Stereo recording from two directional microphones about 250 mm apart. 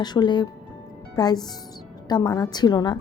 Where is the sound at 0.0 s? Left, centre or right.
Centre.